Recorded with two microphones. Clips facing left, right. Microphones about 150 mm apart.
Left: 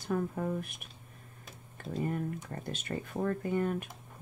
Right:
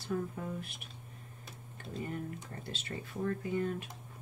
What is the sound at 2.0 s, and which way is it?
A woman's voice, 45° left (ahead or behind).